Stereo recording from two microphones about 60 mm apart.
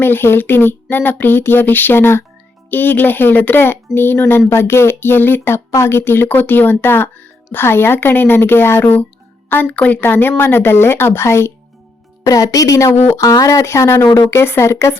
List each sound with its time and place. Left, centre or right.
0.0 s speech: left
5.5 s speech: left
6.2 s speech: left
8.8 s a woman's voice: left
10.0 s speech: left
12.2 s speech: left